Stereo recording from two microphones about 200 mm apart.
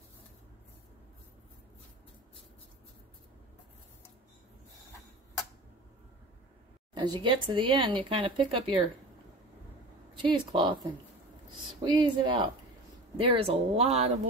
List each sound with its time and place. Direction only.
7.0 s speech: 25° right (ahead or behind)
10.1 s speech: 25° right (ahead or behind)
11.8 s speech: 25° right (ahead or behind)